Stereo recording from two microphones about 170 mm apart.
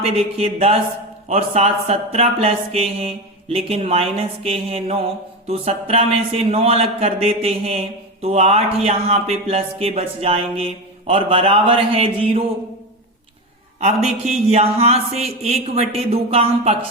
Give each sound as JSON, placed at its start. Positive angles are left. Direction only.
{"t": 0.0, "sound": "speech", "side_deg": -35}
{"t": 14.3, "sound": "speech", "side_deg": -40}